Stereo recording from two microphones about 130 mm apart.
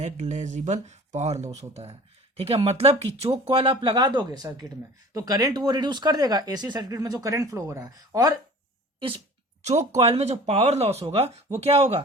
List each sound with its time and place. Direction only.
0.0 s speech: 65° right (ahead or behind); by 8.3 s 25° right (ahead or behind)
9.0 s speech: 45° right (ahead or behind)